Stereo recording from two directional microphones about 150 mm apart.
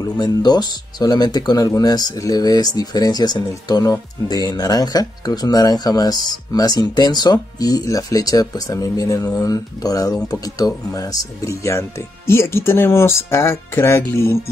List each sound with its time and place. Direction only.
0.0 s speech: 25° left (ahead or behind)